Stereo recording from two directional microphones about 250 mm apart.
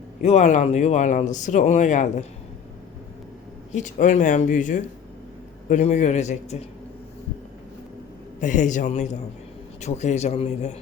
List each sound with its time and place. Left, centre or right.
0.2 s speech: left
3.8 s speech: left
8.4 s speech: left